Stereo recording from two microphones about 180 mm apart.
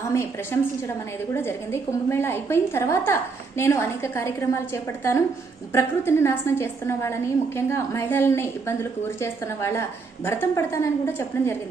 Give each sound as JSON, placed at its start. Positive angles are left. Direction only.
{"t": 0.1, "sound": "a woman's voice", "side_deg": 15}